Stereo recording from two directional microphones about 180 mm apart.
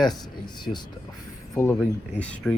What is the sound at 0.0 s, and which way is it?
Speech, 25° left (ahead or behind).